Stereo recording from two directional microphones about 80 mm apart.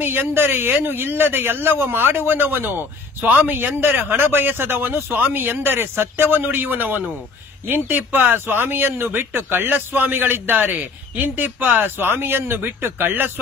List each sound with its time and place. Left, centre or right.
0.0 s a man's voice: right